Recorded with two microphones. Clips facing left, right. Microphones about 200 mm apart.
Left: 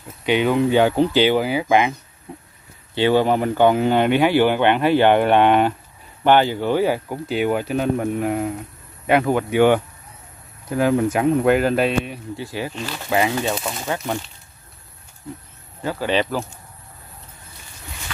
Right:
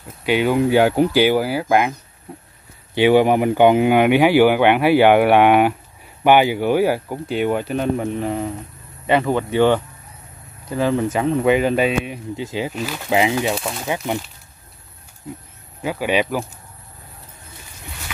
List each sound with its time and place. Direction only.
0.2 s speech: 5° right (ahead or behind)
2.9 s speech: 15° right (ahead or behind)
7.2 s speech: 5° left (ahead or behind)
12.1 s speech: 20° right (ahead or behind); by 13.8 s centre (ahead or behind)
13.8 s speech: 10° right (ahead or behind)
15.8 s speech: 10° right (ahead or behind)